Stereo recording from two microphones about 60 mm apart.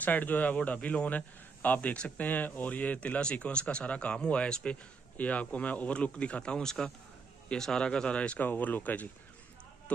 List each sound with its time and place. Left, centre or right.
0.0 s speech: left
8.5 s speech: left